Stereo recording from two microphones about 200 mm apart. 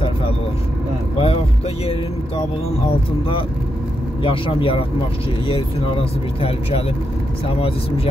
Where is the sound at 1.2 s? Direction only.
30° left (ahead or behind).